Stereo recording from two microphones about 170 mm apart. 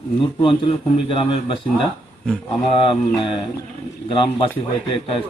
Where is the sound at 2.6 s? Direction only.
35° left (ahead or behind).